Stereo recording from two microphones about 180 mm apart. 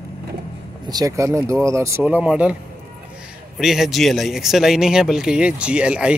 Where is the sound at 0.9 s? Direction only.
20° right (ahead or behind).